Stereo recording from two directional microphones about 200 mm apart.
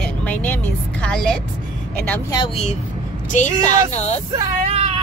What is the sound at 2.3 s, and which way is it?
Speech, 25° left (ahead or behind).